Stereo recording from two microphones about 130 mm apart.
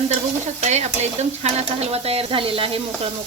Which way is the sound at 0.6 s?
60° right (ahead or behind).